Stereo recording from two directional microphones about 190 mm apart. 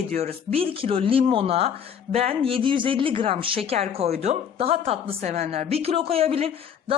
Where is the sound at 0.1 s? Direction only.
35° right (ahead or behind).